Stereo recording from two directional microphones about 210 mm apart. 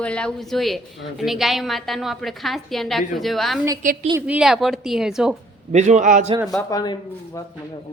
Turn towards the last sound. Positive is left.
turn(degrees=15)  # may be behind; listen again after turning